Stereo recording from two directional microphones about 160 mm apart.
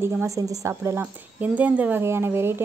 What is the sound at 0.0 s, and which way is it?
Speech, 15° right (ahead or behind).